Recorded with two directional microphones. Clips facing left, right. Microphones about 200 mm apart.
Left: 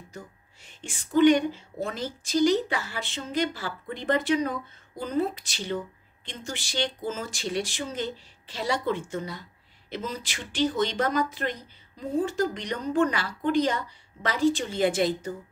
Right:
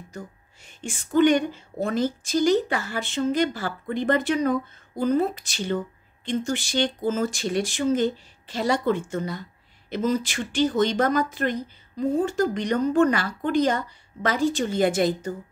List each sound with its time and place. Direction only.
0.8 s a woman's voice: 50° right (ahead or behind)